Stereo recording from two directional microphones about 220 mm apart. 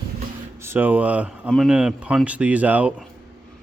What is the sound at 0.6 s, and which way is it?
Speech, 10° right (ahead or behind).